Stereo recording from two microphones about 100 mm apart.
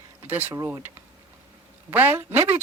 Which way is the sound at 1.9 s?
20° right (ahead or behind).